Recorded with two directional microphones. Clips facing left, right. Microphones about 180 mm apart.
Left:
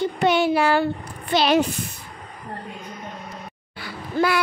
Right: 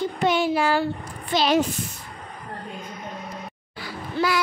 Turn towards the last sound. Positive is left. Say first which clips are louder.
# left 3 dB
turn(degrees=55)  # may be behind; listen again after turning